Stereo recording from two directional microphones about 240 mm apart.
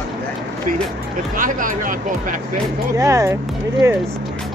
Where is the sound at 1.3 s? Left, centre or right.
Right.